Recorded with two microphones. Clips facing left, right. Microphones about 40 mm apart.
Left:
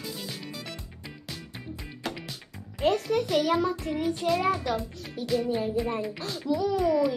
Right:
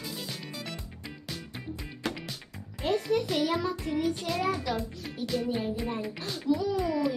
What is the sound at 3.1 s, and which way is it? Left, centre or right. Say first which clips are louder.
Speech: left 1 dB; left.